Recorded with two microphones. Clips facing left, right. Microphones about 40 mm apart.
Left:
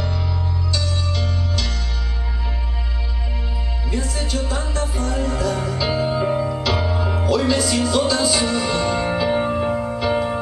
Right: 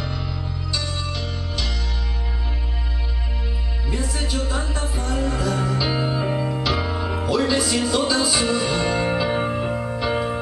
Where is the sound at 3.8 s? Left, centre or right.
Centre.